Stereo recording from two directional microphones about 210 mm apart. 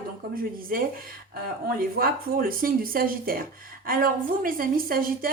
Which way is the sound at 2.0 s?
45° right (ahead or behind).